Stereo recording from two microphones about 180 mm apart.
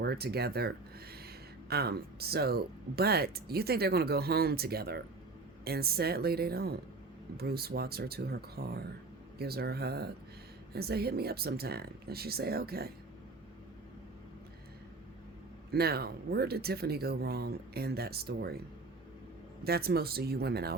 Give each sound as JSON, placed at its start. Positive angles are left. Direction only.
{"t": 0.0, "sound": "speech", "side_deg": -65}
{"t": 1.7, "sound": "speech", "side_deg": -60}
{"t": 15.7, "sound": "speech", "side_deg": -60}
{"t": 19.6, "sound": "speech", "side_deg": -60}